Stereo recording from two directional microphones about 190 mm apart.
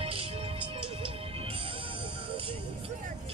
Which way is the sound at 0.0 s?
30° right (ahead or behind).